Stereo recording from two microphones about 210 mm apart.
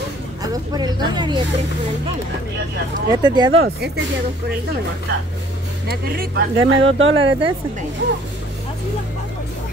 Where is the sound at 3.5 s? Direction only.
50° right (ahead or behind).